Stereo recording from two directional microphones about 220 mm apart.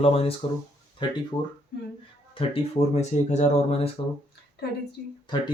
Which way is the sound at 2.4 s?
25° left (ahead or behind).